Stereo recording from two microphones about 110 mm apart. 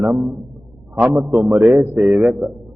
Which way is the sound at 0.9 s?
10° right (ahead or behind).